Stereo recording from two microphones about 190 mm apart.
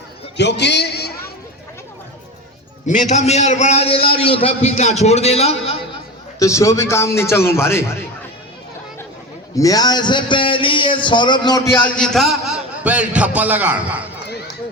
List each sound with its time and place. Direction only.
0.3 s a man's voice: 65° left (ahead or behind)
2.8 s a man's voice: 40° left (ahead or behind)
6.4 s a man's voice: 15° left (ahead or behind)
9.6 s a man's voice: 20° left (ahead or behind)
11.8 s a man's voice: 5° left (ahead or behind)